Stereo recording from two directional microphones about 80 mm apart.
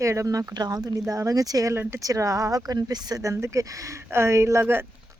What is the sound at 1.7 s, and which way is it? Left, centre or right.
Speech, right.